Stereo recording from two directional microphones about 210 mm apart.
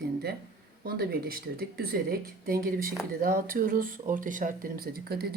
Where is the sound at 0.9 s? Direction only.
45° right (ahead or behind).